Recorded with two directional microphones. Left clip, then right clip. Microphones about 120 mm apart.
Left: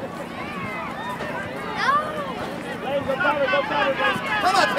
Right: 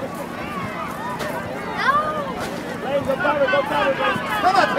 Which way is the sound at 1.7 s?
5° left (ahead or behind).